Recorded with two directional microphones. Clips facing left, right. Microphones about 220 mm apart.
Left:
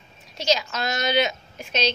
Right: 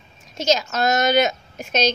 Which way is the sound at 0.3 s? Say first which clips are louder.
Right 3 dB; 45° right (ahead or behind).